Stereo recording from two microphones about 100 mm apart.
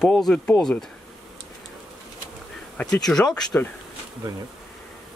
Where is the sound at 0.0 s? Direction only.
5° left (ahead or behind).